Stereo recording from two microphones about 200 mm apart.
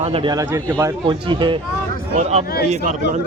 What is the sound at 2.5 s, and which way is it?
Speech, 50° left (ahead or behind).